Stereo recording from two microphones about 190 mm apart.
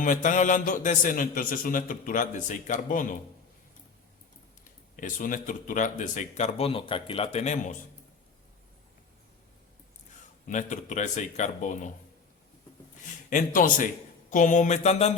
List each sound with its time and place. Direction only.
0.0 s a man's voice: 45° left (ahead or behind)
4.9 s speech: 45° left (ahead or behind)
10.4 s speech: 40° left (ahead or behind)
13.3 s a man's voice: 45° left (ahead or behind)